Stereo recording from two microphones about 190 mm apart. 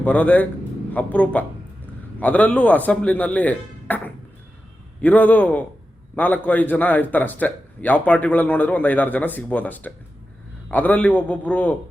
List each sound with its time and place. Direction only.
0.0 s a man's voice: 10° left (ahead or behind)